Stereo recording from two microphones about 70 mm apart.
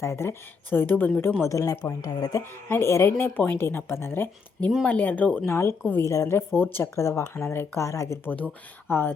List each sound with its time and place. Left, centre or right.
0.0 s speech: left
1.4 s speech: left
2.0 s speech: left
2.4 s speech: left
5.5 s speech: left
6.3 s speech: left
6.9 s speech: left
8.2 s speech: left